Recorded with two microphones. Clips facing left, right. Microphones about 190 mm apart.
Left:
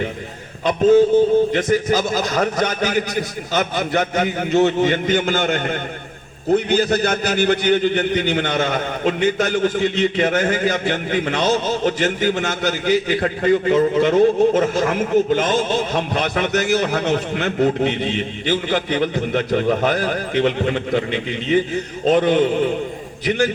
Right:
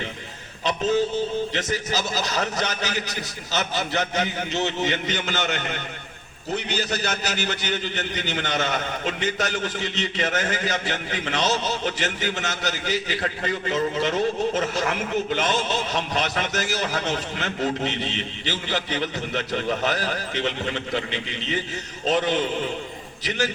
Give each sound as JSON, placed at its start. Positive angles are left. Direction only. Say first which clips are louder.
{"t": 0.6, "sound": "a man's voice", "louder": "left 9 dB", "side_deg": 50}